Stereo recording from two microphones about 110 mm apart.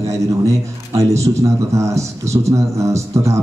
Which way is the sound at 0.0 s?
30° right (ahead or behind).